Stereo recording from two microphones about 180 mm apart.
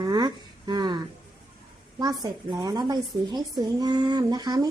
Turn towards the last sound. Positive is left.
turn(degrees=-20)  # may be behind; listen again after turning